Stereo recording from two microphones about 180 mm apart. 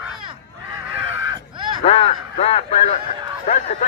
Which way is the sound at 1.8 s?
35° left (ahead or behind).